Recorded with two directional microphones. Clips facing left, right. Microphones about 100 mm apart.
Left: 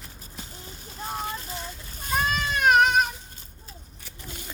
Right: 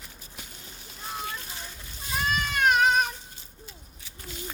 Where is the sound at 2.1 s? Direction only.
50° left (ahead or behind).